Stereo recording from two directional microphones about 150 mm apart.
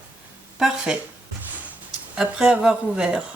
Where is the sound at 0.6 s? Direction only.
5° right (ahead or behind).